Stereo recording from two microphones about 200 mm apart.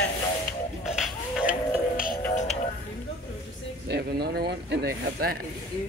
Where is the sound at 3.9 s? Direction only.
55° right (ahead or behind).